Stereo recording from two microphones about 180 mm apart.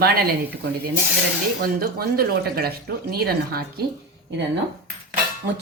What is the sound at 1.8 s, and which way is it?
A woman's voice, 55° right (ahead or behind).